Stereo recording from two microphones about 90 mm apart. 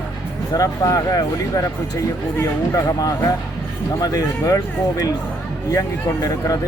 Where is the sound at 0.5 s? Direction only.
40° left (ahead or behind).